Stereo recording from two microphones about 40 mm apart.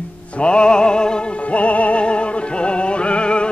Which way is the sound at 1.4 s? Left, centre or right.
Left.